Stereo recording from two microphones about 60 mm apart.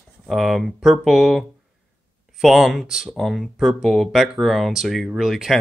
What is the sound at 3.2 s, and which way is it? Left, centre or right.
Speech, centre.